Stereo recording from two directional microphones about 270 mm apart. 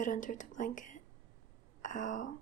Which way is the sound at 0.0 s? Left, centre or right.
Left.